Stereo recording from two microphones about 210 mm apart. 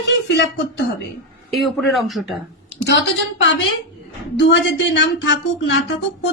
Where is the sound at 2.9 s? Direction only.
60° left (ahead or behind).